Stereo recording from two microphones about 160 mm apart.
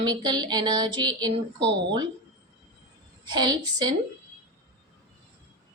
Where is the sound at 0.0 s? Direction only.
30° right (ahead or behind).